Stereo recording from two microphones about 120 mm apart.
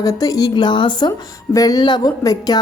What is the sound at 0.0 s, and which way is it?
A woman's voice, 30° left (ahead or behind).